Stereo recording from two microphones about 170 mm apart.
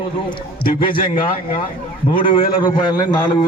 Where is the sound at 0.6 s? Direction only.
60° left (ahead or behind).